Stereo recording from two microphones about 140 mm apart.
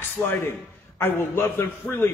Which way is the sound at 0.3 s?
15° left (ahead or behind).